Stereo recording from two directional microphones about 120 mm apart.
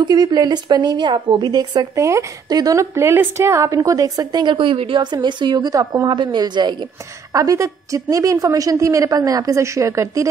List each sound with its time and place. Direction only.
0.0 s a woman's voice: 35° right (ahead or behind)
7.3 s a woman's voice: 25° right (ahead or behind)